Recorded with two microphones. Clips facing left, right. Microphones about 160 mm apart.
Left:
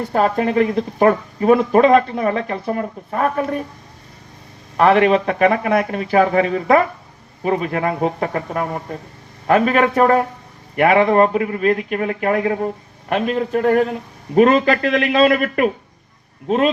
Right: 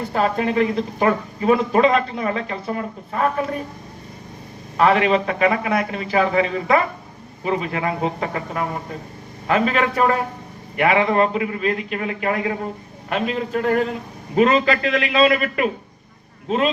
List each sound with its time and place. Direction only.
0.1 s speech: 45° left (ahead or behind)
4.8 s speech: 55° left (ahead or behind)